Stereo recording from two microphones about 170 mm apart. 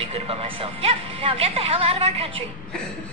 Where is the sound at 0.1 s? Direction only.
35° right (ahead or behind).